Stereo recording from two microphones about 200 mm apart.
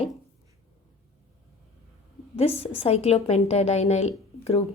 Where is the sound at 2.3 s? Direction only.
30° left (ahead or behind).